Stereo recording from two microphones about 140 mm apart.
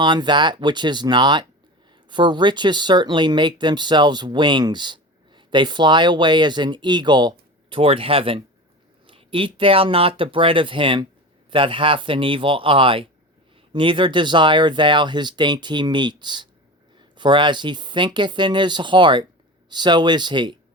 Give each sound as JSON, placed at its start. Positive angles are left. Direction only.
{"t": 0.0, "sound": "speech", "side_deg": -35}